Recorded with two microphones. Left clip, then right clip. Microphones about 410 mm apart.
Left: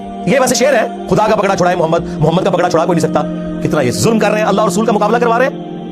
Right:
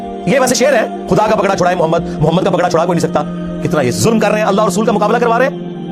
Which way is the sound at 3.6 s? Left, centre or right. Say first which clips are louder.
Even; centre.